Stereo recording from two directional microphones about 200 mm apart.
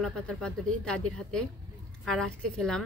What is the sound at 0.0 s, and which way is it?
Speech, 5° left (ahead or behind).